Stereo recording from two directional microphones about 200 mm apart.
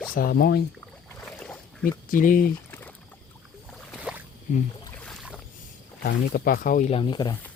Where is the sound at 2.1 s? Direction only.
45° left (ahead or behind).